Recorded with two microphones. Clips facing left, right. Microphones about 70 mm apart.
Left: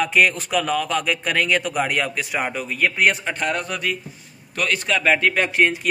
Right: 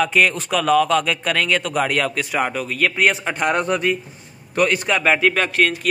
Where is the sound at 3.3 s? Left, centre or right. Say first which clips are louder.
Right 3 dB; centre.